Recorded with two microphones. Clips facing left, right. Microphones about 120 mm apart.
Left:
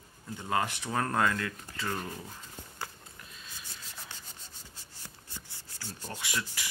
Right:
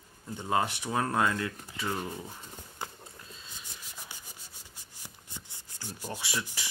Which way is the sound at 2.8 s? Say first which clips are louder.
Right 2 dB; 25° right (ahead or behind).